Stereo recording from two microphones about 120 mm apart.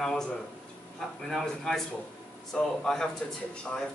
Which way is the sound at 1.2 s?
5° left (ahead or behind).